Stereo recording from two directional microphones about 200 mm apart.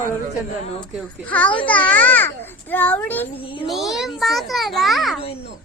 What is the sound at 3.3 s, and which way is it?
Speech, 25° left (ahead or behind).